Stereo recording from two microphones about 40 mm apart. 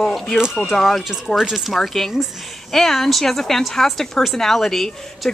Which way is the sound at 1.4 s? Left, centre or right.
Centre.